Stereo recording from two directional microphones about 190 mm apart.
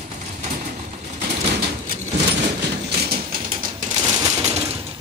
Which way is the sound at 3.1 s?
50° right (ahead or behind).